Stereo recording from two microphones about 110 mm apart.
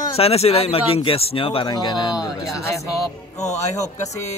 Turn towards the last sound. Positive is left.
turn(degrees=90)